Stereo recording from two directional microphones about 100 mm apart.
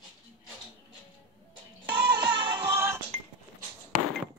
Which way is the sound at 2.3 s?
45° right (ahead or behind).